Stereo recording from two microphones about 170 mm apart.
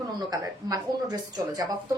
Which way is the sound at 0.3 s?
20° right (ahead or behind).